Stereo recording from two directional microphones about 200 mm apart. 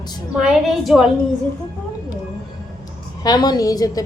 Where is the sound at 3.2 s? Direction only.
20° left (ahead or behind).